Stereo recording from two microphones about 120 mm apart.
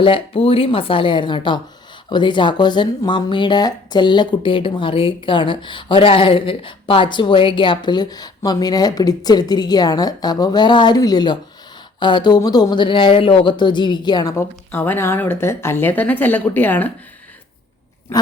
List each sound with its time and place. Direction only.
0.0 s a woman's voice: 50° left (ahead or behind)
14.3 s a woman's voice: 20° left (ahead or behind)